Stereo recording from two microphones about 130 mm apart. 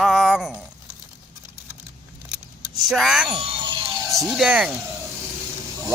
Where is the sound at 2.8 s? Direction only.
Centre (ahead or behind).